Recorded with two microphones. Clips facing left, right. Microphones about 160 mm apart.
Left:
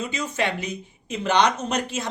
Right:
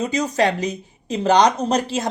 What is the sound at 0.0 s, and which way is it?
Speech, 40° right (ahead or behind).